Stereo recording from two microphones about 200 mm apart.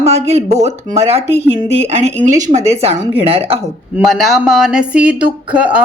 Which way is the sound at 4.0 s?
Centre (ahead or behind).